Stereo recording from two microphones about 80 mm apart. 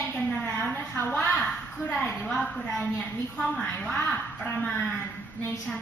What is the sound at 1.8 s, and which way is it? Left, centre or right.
Speech, left.